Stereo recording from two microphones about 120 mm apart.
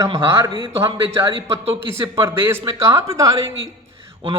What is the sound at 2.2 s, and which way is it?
Speech, 20° right (ahead or behind).